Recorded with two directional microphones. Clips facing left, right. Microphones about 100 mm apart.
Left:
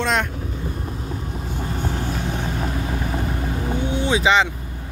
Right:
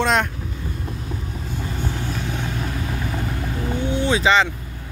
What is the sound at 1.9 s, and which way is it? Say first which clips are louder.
Vehicle: left 2 dB; 25° left (ahead or behind).